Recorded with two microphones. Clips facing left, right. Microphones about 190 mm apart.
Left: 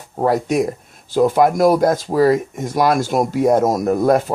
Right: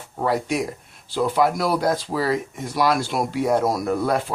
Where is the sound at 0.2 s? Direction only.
45° left (ahead or behind).